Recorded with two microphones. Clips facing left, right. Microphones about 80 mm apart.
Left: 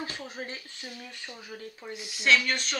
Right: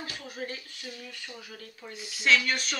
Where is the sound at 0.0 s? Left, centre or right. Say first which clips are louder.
Left 1 dB; left.